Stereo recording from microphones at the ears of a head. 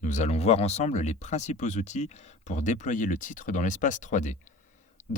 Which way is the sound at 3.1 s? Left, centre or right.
Left.